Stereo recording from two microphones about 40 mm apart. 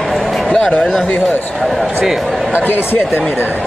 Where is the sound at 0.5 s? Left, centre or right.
Left.